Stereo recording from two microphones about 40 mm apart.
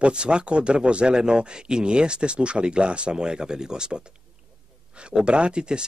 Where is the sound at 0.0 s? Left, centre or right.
Right.